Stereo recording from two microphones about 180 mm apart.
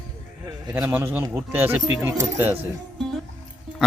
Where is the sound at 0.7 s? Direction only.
5° right (ahead or behind).